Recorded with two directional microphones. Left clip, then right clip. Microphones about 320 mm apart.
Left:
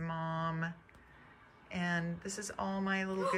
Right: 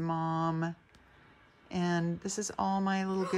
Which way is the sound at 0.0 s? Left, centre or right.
Centre.